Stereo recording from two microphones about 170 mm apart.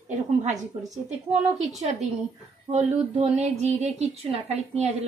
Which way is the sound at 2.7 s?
40° right (ahead or behind).